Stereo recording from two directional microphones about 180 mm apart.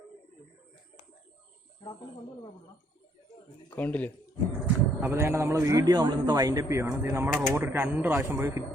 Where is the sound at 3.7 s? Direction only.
10° left (ahead or behind).